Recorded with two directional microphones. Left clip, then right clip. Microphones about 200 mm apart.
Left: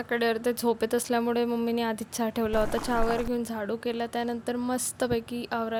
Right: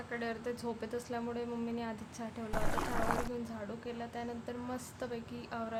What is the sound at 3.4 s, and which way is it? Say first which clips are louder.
A woman's voice: left 12 dB; 40° left (ahead or behind).